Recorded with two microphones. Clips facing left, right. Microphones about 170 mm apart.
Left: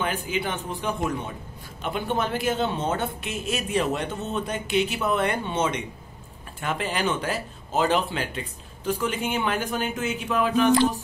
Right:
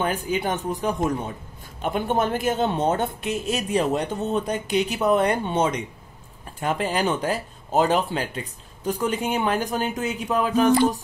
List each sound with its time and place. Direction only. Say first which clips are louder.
0.0 s a man's voice: right 3 dB; 40° right (ahead or behind)